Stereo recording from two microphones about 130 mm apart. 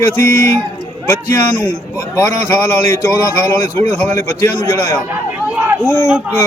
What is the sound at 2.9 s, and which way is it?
A man's voice, 20° left (ahead or behind).